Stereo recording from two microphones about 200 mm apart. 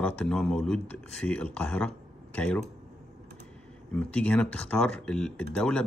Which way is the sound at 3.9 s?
5° left (ahead or behind).